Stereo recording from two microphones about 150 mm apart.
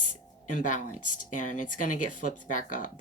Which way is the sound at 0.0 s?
60° left (ahead or behind).